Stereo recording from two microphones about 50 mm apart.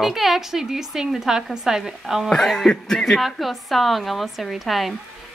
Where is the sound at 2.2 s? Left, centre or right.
Centre.